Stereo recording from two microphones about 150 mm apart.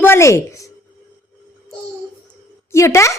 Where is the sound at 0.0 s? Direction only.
15° left (ahead or behind).